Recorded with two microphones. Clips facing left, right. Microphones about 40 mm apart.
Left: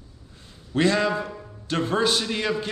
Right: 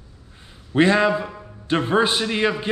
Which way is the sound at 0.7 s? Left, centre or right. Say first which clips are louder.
Right 5 dB; right.